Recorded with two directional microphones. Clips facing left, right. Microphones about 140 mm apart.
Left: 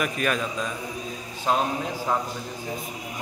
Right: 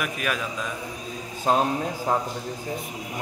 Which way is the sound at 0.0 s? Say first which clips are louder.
Left 3 dB; 5° right (ahead or behind).